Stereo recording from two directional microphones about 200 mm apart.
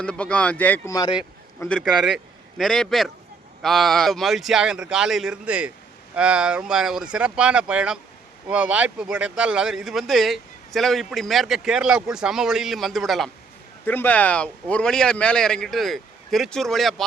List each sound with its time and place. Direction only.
0.0 s speech: 5° left (ahead or behind)
0.9 s speech: 20° left (ahead or behind)
1.5 s a man's voice: 5° left (ahead or behind)